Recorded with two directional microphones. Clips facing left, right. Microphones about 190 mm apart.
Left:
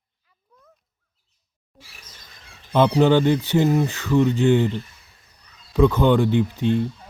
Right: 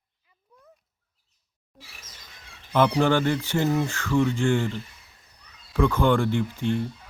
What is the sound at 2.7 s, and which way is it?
Speech, 25° left (ahead or behind).